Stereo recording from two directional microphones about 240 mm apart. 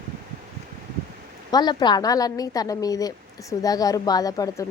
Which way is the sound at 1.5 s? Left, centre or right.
Centre.